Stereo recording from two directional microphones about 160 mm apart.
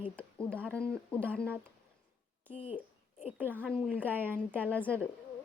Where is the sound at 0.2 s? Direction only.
10° left (ahead or behind).